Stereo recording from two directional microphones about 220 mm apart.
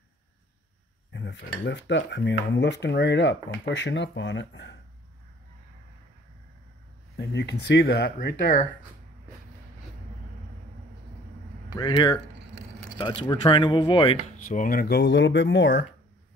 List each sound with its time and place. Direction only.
1.1 s cutlery: 55° left (ahead or behind)
7.2 s cutlery: 50° left (ahead or behind)
11.7 s speech: 20° left (ahead or behind)
14.5 s cutlery: 40° left (ahead or behind)